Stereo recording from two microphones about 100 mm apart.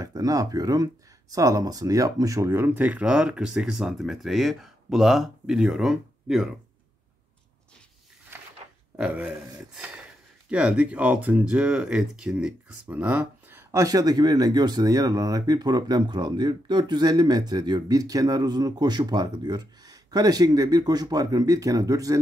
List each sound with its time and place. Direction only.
0.0 s speech: 35° right (ahead or behind); by 6.5 s 5° right (ahead or behind)
8.9 s speech: 15° right (ahead or behind); by 22.2 s 35° right (ahead or behind)